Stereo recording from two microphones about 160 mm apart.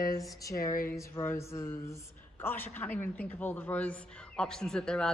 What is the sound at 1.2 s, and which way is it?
A woman's voice, 15° left (ahead or behind).